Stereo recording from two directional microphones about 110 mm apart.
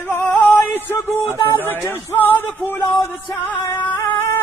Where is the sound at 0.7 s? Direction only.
20° left (ahead or behind).